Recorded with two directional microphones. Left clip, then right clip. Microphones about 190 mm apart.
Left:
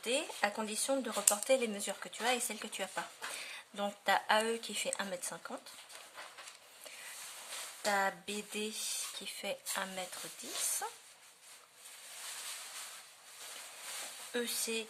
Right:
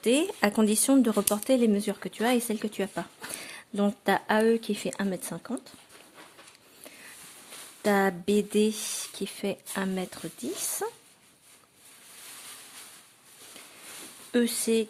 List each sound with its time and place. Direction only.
0.0 s speech: 45° right (ahead or behind)
1.3 s speech: 35° right (ahead or behind)
7.9 s speech: 40° right (ahead or behind)
14.3 s speech: 40° right (ahead or behind)